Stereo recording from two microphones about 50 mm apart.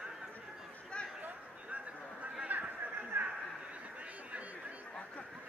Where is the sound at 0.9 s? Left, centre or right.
Left.